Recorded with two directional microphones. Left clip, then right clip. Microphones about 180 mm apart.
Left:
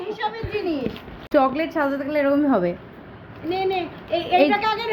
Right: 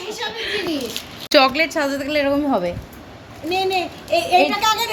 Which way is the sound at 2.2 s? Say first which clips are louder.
Even; 15° left (ahead or behind).